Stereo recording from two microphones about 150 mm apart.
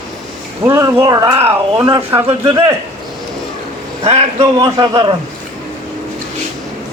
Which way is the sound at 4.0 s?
40° right (ahead or behind).